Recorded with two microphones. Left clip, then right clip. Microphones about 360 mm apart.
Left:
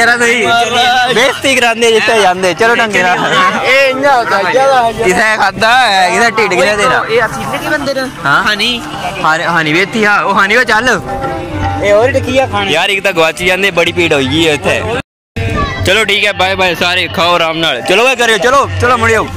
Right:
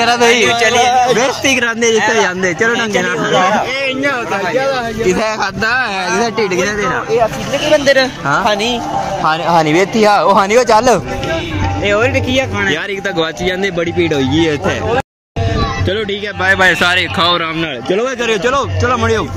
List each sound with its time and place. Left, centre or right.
0.0 s a man's voice: centre
1.1 s speech: centre
5.0 s speech: centre
7.7 s speech: right
9.2 s speech: centre
11.8 s speech: centre
12.6 s speech: centre
16.1 s speech: centre